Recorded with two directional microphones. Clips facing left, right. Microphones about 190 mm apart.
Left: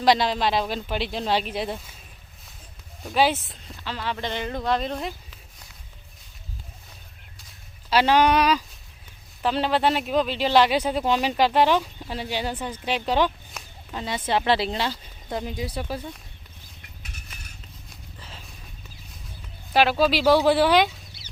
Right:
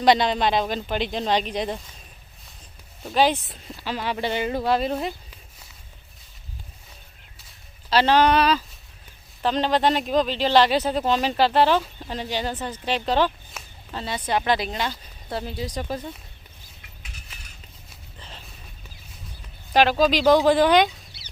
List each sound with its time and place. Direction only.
0.0 s speech: centre (ahead or behind)
3.0 s speech: 5° left (ahead or behind)
3.8 s speech: 15° right (ahead or behind)
7.9 s speech: 10° left (ahead or behind); by 14.9 s 30° left (ahead or behind)
15.3 s speech: 15° left (ahead or behind)
16.0 s speech: 10° right (ahead or behind)
18.2 s a sound: 5° left (ahead or behind)
19.7 s speech: 5° left (ahead or behind)